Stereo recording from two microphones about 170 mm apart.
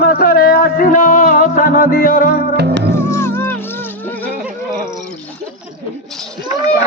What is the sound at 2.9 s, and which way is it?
Music, 15° left (ahead or behind).